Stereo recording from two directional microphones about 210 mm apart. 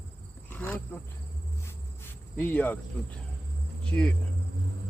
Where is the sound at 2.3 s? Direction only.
10° left (ahead or behind).